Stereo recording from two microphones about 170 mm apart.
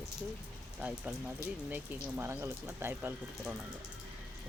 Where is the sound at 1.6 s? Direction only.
10° right (ahead or behind).